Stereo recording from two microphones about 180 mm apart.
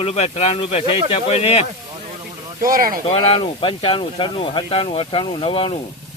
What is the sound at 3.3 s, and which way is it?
Speech, 30° left (ahead or behind).